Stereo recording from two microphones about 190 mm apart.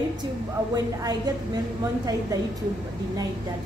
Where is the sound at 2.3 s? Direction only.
20° right (ahead or behind).